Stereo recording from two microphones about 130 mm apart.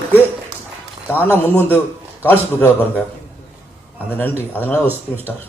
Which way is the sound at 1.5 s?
15° left (ahead or behind).